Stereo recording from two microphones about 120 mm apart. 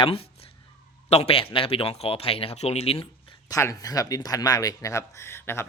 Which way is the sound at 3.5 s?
25° left (ahead or behind).